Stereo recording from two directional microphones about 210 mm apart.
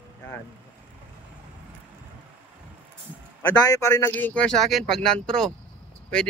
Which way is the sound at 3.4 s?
15° left (ahead or behind).